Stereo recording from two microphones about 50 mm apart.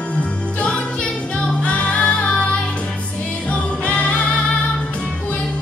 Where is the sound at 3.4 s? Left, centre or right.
Left.